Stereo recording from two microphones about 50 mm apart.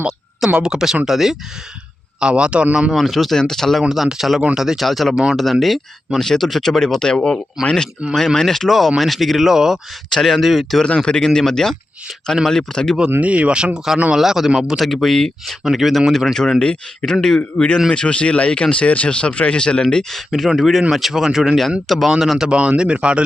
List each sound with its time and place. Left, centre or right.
0.6 s speech: centre
2.2 s speech: right
2.9 s speech: centre
3.8 s speech: centre
4.8 s speech: centre
10.1 s speech: centre
10.8 s speech: centre
13.1 s speech: right
14.2 s speech: centre
14.8 s speech: centre
17.9 s speech: left
20.5 s speech: centre
21.8 s speech: centre
22.4 s speech: right